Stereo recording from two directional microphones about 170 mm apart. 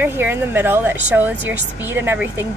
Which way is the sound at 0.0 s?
10° right (ahead or behind).